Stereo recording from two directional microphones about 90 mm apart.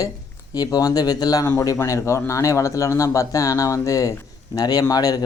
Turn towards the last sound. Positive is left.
turn(degrees=45)  # may be behind; listen again after turning